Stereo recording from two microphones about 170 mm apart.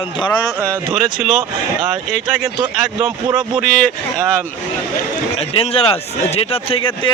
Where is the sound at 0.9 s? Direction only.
5° right (ahead or behind).